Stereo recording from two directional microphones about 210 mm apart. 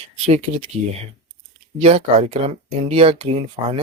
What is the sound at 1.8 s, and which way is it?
Speech, 30° right (ahead or behind).